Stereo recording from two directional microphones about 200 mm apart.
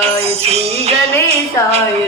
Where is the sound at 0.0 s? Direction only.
30° right (ahead or behind).